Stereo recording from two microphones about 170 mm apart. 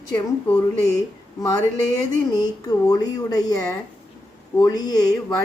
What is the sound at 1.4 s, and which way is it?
A woman's voice, 20° left (ahead or behind).